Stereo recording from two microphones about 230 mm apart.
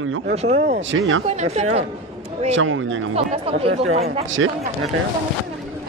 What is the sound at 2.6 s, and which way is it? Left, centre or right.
Speech, right.